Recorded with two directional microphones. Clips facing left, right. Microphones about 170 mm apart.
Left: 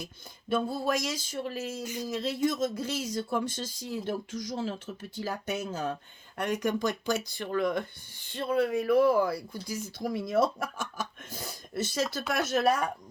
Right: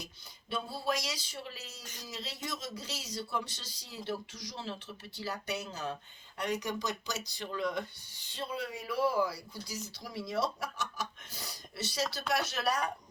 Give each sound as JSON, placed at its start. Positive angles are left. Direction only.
{"t": 0.5, "sound": "speech", "side_deg": 50}
{"t": 1.8, "sound": "a sound", "side_deg": 10}
{"t": 2.0, "sound": "speech", "side_deg": 50}